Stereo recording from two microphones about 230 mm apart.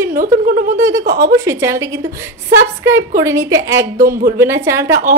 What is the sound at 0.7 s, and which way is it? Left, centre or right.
Speech, centre.